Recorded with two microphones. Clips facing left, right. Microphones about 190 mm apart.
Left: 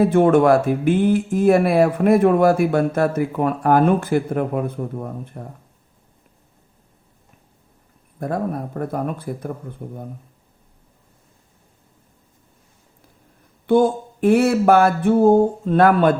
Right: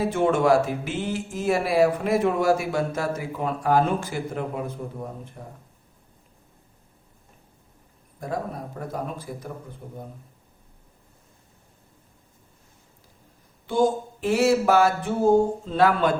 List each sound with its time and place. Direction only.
0.0 s speech: 55° left (ahead or behind)
8.2 s speech: 55° left (ahead or behind)
13.7 s speech: 60° left (ahead or behind)